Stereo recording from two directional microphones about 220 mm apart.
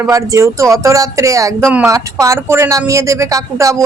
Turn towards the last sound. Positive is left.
turn(degrees=-15)  # may be behind; listen again after turning